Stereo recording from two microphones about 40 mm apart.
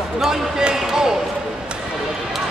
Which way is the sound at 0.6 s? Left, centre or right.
Centre.